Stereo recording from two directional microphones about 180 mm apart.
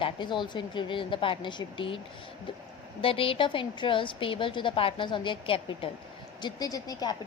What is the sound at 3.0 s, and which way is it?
A woman's voice, 30° left (ahead or behind).